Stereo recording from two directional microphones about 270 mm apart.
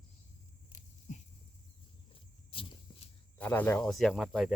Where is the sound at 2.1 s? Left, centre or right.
Centre.